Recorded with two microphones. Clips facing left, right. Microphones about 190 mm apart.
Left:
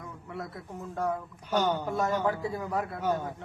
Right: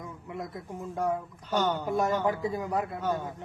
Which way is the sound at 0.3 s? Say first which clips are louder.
Right 1 dB; 15° right (ahead or behind).